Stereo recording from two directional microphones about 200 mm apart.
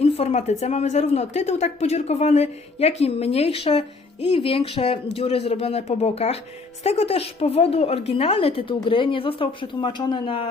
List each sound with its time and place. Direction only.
0.0 s a woman's voice: 30° left (ahead or behind)